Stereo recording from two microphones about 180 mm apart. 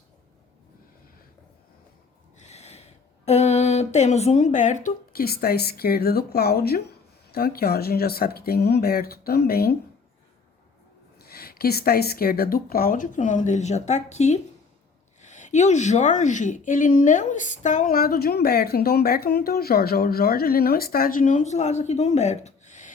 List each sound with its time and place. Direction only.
2.4 s speech: 40° left (ahead or behind); by 9.7 s 60° left (ahead or behind)
11.2 s a woman's voice: 60° left (ahead or behind); by 22.9 s 40° left (ahead or behind)